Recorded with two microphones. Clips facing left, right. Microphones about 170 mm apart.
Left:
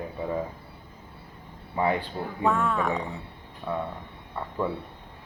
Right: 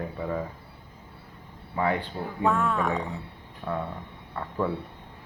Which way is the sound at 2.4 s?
Centre (ahead or behind).